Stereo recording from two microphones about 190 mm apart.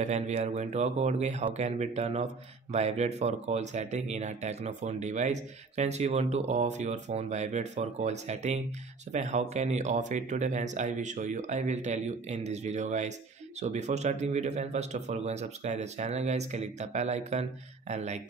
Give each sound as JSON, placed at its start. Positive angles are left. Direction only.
{"t": 0.0, "sound": "speech", "side_deg": -35}